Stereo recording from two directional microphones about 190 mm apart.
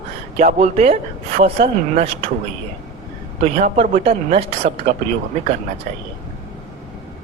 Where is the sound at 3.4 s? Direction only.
35° right (ahead or behind).